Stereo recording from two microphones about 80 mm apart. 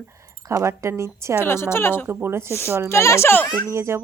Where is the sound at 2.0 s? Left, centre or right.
Right.